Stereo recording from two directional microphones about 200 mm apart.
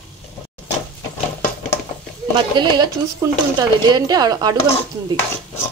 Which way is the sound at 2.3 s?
20° right (ahead or behind).